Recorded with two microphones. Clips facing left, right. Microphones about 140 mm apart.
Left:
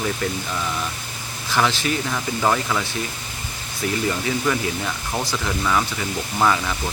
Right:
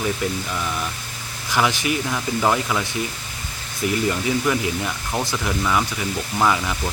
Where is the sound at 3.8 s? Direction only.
20° right (ahead or behind).